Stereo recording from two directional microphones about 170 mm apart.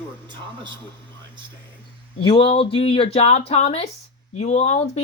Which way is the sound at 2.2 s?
30° left (ahead or behind).